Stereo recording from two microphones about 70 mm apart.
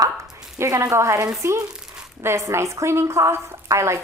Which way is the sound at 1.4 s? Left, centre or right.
Right.